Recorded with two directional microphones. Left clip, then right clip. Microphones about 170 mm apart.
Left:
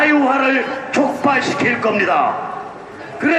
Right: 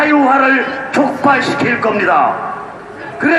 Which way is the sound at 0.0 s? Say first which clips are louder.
Right 4 dB; centre (ahead or behind).